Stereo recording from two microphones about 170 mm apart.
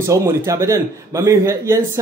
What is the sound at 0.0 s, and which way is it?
A man's voice, 15° right (ahead or behind).